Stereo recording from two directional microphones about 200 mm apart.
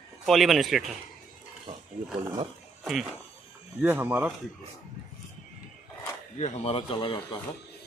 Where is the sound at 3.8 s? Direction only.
10° right (ahead or behind).